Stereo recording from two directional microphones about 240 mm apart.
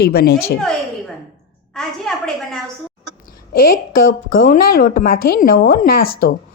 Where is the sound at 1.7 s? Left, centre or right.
Centre.